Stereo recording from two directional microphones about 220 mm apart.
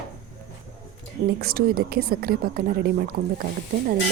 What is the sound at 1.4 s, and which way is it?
A woman's voice, 45° right (ahead or behind).